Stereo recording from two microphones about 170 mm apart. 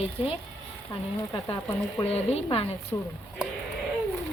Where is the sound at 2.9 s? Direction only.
20° left (ahead or behind).